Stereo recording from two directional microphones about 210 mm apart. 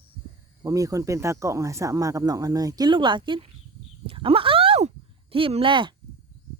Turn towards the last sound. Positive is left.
turn(degrees=-25)  # may be behind; listen again after turning